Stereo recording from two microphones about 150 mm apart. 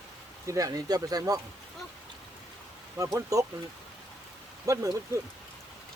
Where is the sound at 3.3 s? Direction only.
20° right (ahead or behind).